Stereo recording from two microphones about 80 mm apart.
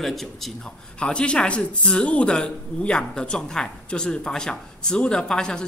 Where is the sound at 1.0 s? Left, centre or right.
Centre.